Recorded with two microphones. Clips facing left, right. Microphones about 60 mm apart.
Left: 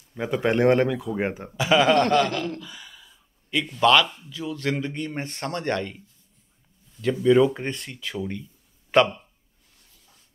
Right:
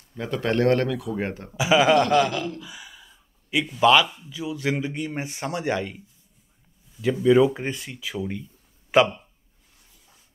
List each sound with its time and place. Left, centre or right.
0.1 s speech: centre
1.5 s a man's voice: centre